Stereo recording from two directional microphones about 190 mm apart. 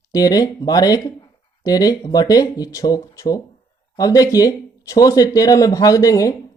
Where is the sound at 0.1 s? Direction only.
20° left (ahead or behind).